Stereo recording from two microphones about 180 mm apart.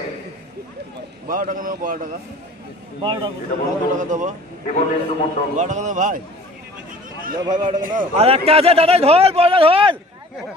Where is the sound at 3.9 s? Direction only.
45° right (ahead or behind).